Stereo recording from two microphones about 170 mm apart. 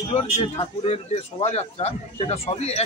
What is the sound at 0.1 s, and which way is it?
Speech, 30° left (ahead or behind).